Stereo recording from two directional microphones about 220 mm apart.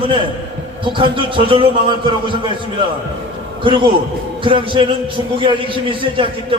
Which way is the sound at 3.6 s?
20° right (ahead or behind).